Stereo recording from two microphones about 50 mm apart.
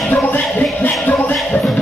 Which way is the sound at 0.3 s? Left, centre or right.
Left.